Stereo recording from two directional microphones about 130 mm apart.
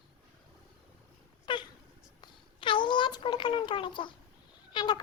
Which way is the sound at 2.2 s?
40° left (ahead or behind).